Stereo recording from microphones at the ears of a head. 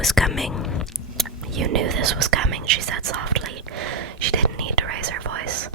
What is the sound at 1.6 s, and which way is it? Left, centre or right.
Speech, right.